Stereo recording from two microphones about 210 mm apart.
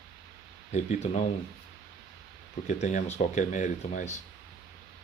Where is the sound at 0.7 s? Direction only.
35° left (ahead or behind).